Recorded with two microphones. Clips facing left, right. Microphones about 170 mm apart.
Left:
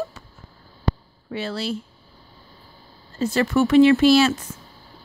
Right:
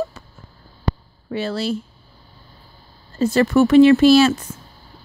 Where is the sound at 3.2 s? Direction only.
40° right (ahead or behind).